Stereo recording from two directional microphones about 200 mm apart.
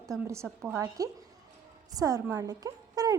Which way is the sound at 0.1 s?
15° right (ahead or behind).